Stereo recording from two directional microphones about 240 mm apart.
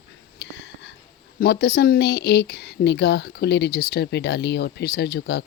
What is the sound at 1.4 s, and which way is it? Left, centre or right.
Speech, left.